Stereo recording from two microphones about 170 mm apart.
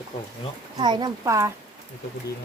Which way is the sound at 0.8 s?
25° right (ahead or behind).